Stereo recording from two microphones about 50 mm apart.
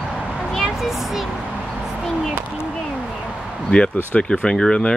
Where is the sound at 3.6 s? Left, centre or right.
Centre.